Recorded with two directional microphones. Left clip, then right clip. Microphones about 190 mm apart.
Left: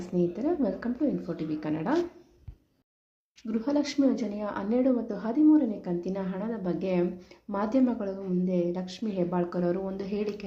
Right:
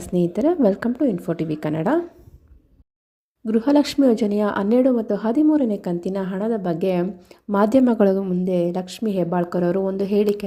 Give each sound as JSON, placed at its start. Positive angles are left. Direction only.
{"t": 0.1, "sound": "a woman's voice", "side_deg": -45}
{"t": 3.4, "sound": "a woman's voice", "side_deg": -45}